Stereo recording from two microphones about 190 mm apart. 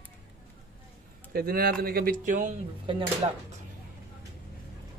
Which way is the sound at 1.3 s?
50° right (ahead or behind).